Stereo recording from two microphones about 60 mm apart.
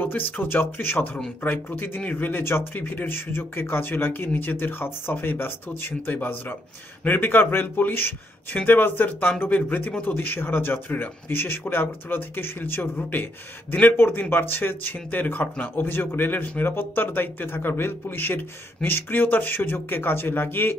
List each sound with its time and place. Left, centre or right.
0.0 s speech: left
2.4 s speech: left
2.8 s speech: left
13.9 s speech: left